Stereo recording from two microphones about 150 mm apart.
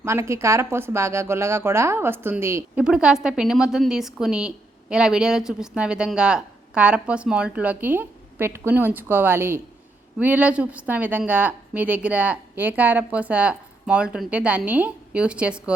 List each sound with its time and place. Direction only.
0.0 s speech: 20° right (ahead or behind)
2.7 s a woman's voice: 5° right (ahead or behind)